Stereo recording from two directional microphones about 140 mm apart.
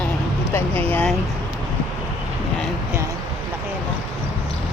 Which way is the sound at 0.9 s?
10° left (ahead or behind).